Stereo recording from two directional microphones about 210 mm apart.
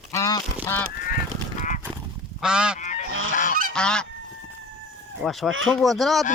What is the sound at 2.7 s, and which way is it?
Goose, 35° left (ahead or behind).